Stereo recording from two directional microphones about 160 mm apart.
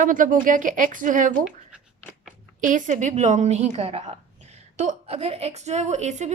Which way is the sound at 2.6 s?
50° right (ahead or behind).